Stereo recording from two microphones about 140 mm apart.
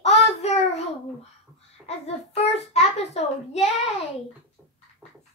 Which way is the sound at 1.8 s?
50° left (ahead or behind).